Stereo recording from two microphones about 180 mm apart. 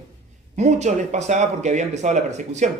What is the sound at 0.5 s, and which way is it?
Speech, 40° right (ahead or behind).